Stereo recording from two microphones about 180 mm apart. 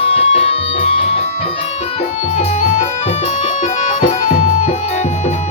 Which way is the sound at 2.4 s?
35° left (ahead or behind).